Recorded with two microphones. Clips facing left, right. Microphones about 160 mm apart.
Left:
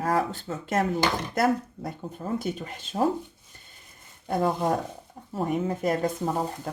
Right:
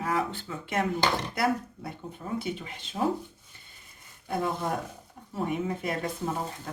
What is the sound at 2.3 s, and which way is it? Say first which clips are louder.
Speech: left 2 dB; 45° left (ahead or behind).